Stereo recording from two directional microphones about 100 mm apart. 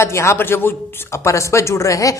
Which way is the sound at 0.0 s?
30° left (ahead or behind).